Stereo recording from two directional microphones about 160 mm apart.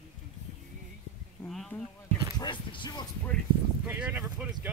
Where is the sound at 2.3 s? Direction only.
30° left (ahead or behind).